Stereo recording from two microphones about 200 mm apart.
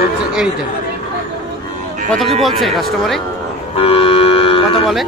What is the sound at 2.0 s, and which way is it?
Speech, centre (ahead or behind).